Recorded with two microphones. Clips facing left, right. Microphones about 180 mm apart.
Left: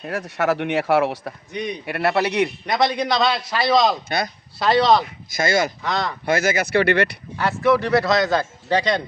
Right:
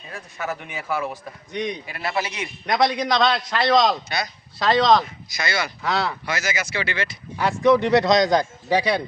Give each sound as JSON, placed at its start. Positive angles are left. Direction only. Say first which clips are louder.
{"t": 0.0, "sound": "speech", "louder": "left 9 dB", "side_deg": 75}
{"t": 2.6, "sound": "a man's voice", "louder": "even", "side_deg": 0}
{"t": 5.3, "sound": "speech", "louder": "left 7 dB", "side_deg": 45}
{"t": 5.8, "sound": "a man's voice", "louder": "even", "side_deg": -5}
{"t": 6.2, "sound": "speech", "louder": "left 7 dB", "side_deg": 55}
{"t": 7.3, "sound": "speech", "louder": "right 1 dB", "side_deg": -15}